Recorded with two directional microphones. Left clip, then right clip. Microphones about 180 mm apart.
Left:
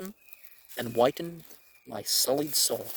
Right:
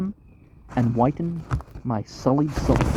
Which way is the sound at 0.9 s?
65° left (ahead or behind).